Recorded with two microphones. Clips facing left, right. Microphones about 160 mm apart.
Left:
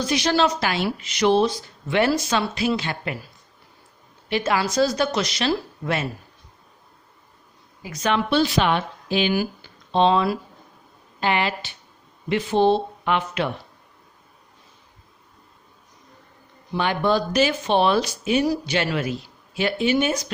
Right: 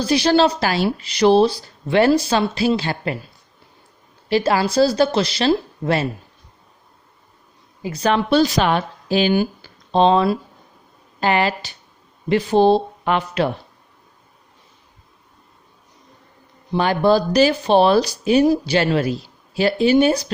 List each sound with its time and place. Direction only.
0.0 s speech: 35° right (ahead or behind)
4.3 s speech: 35° right (ahead or behind)
7.8 s speech: 30° right (ahead or behind)
16.7 s speech: 35° right (ahead or behind)